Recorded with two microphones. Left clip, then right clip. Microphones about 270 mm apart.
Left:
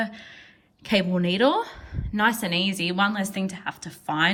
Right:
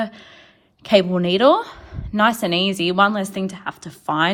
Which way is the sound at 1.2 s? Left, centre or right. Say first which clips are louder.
Right 7 dB; centre.